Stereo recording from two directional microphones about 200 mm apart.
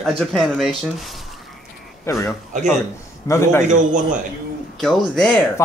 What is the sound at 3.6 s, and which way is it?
Speech, 40° right (ahead or behind).